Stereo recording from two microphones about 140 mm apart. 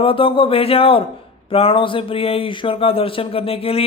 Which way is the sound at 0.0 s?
40° left (ahead or behind).